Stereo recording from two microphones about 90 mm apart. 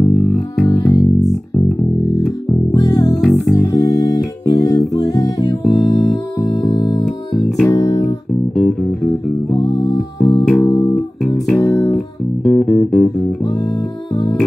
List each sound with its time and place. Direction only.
0.7 s music: 35° left (ahead or behind)
2.7 s music: 40° left (ahead or behind)
3.2 s music: centre (ahead or behind)
3.5 s music: 40° left (ahead or behind)
7.4 s music: centre (ahead or behind)
7.7 s music: 40° left (ahead or behind)
8.5 s music: 5° left (ahead or behind)
9.6 s music: 35° left (ahead or behind)
10.4 s music: 15° left (ahead or behind)
11.2 s music: centre (ahead or behind)
11.6 s music: 40° left (ahead or behind)
12.4 s music: 5° left (ahead or behind)